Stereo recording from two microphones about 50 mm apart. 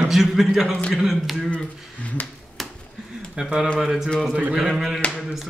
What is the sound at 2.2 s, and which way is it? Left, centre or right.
Speech, left.